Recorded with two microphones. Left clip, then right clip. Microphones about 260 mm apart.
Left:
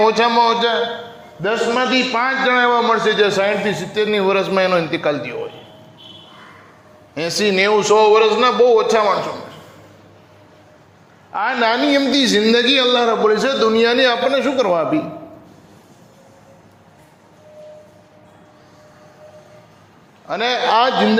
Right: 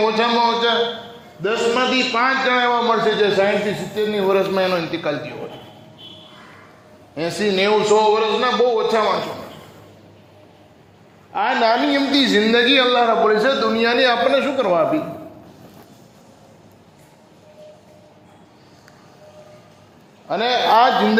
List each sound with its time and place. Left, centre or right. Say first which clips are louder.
0.0 s a man's voice: left 3 dB; left
7.2 s a man's voice: left 3 dB; left
11.3 s a man's voice: even; left
20.2 s a man's voice: even; left